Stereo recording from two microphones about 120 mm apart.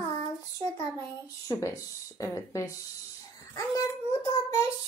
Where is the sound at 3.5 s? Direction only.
30° left (ahead or behind).